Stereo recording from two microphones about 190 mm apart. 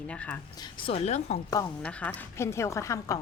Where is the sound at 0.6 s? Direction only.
25° left (ahead or behind).